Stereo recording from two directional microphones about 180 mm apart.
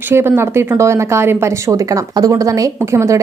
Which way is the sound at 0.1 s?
15° right (ahead or behind).